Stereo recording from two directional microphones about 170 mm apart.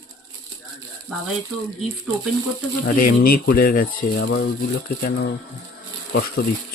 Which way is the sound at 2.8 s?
50° left (ahead or behind).